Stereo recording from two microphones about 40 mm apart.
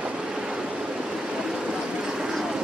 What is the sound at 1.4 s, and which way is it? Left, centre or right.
Train, centre.